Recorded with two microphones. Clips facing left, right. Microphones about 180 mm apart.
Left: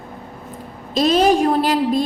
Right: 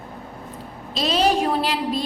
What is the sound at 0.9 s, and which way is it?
A woman's voice, 50° left (ahead or behind).